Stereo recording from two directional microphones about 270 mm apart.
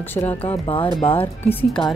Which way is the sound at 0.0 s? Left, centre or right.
Centre.